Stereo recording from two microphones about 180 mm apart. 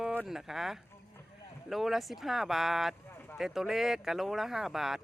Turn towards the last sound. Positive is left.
turn(degrees=0)  # may be behind; listen again after turning